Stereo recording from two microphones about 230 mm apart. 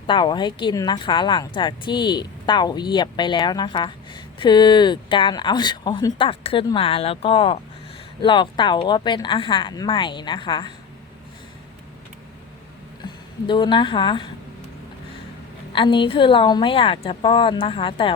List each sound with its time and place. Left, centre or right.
0.1 s a woman's voice: centre
13.5 s a woman's voice: left
15.7 s a woman's voice: left